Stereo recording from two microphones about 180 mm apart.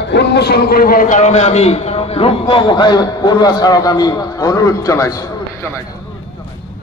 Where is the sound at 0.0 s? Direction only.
70° left (ahead or behind); by 5.7 s 20° left (ahead or behind).